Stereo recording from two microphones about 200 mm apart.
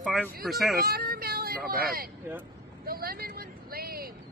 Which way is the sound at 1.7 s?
45° right (ahead or behind).